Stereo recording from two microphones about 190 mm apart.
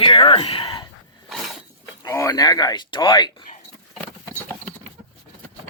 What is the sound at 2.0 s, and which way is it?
Speech, 15° left (ahead or behind).